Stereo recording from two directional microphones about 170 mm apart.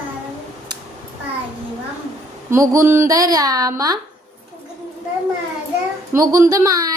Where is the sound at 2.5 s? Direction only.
20° right (ahead or behind).